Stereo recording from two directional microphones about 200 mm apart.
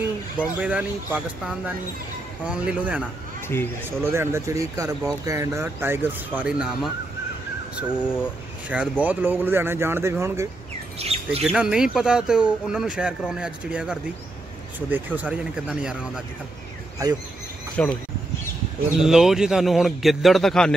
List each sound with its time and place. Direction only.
0.4 s a man's voice: 5° right (ahead or behind)
8.0 s speech: 10° left (ahead or behind)
8.6 s speech: 5° right (ahead or behind)
11.0 s speech: 30° right (ahead or behind)
11.4 s a man's voice: 5° right (ahead or behind)
17.8 s speech: 5° left (ahead or behind)
18.9 s a man's voice: centre (ahead or behind)